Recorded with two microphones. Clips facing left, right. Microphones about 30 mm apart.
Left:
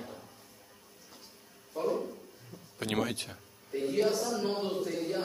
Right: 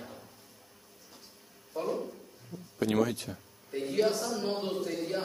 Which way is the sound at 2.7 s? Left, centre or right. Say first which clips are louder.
Right 4 dB; left.